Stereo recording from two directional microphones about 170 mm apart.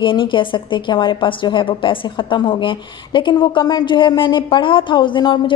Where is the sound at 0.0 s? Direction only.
30° left (ahead or behind).